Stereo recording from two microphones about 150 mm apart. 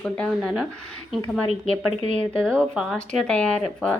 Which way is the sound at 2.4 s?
5° left (ahead or behind).